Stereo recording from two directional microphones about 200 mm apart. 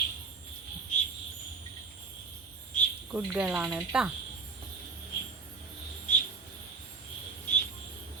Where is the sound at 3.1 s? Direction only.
5° right (ahead or behind).